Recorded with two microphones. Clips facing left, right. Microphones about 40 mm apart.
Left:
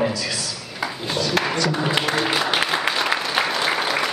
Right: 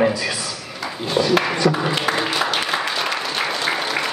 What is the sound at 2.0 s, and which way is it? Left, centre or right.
Music, centre.